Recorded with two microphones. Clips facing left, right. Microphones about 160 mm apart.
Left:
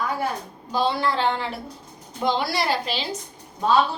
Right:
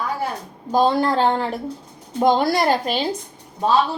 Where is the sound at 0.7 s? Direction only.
45° right (ahead or behind).